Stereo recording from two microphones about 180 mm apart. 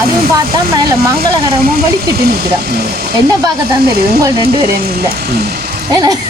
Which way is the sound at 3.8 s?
60° right (ahead or behind).